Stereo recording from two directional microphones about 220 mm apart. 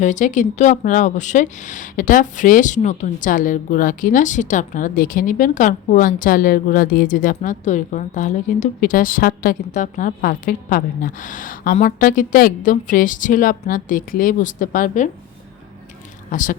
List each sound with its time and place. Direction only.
0.0 s speech: 35° left (ahead or behind)
16.3 s speech: 35° left (ahead or behind)